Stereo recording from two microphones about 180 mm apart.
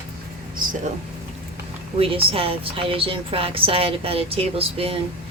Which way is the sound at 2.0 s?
30° right (ahead or behind).